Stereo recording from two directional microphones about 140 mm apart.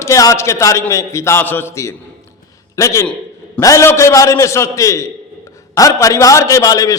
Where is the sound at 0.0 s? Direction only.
20° left (ahead or behind).